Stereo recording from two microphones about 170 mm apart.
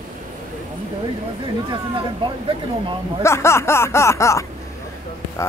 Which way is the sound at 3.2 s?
15° left (ahead or behind).